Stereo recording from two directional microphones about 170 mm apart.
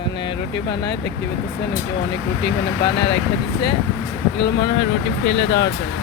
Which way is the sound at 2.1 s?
75° left (ahead or behind).